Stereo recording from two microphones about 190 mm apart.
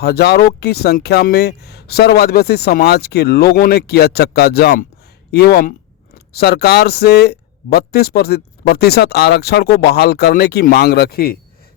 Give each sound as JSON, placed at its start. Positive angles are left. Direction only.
{"t": 0.0, "sound": "speech", "side_deg": 55}